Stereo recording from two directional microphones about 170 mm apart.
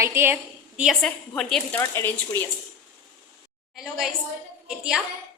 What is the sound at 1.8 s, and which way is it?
Speech, 15° left (ahead or behind).